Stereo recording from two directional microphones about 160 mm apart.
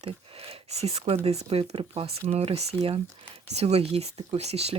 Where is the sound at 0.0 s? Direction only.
40° right (ahead or behind).